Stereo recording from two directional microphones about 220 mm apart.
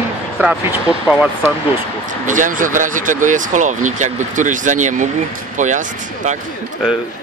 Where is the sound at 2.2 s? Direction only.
35° right (ahead or behind).